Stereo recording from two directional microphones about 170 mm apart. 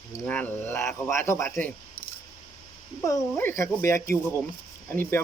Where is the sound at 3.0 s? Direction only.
15° left (ahead or behind).